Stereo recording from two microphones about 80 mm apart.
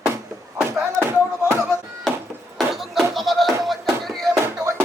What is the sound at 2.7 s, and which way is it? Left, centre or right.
Music, centre.